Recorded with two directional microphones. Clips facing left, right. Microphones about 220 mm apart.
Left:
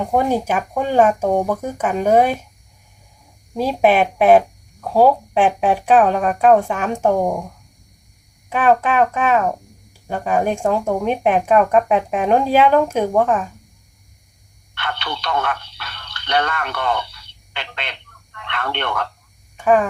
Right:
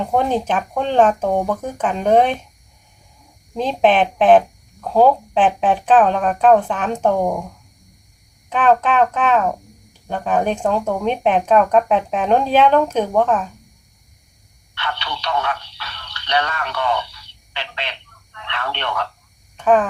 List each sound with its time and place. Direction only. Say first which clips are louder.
0.0 s speech: left 1 dB; 10° left (ahead or behind)
3.5 s speech: left 1 dB; 10° left (ahead or behind)
8.4 s speech: even; 10° left (ahead or behind)
14.8 s telephone: left 1 dB; 55° left (ahead or behind)
19.5 s speech: even; 10° left (ahead or behind)